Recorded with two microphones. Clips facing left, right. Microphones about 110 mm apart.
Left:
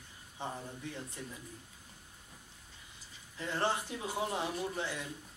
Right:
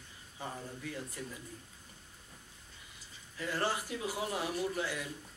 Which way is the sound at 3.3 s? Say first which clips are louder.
Left 1 dB; 20° left (ahead or behind).